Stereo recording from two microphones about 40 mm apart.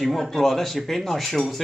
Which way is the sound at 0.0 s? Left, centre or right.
Centre.